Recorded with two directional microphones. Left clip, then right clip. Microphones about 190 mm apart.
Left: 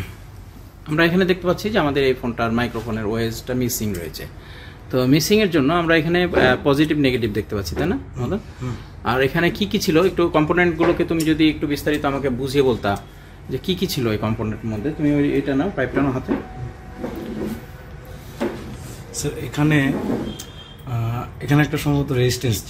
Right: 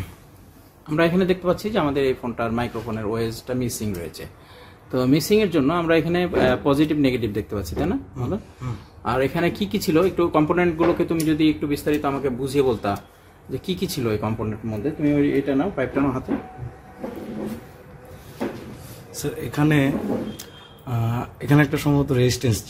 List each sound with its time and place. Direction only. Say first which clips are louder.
0.8 s a man's voice: left 2 dB; 5° right (ahead or behind)
19.1 s a man's voice: left 1 dB; 45° right (ahead or behind)
20.9 s speech: right 1 dB; 40° right (ahead or behind)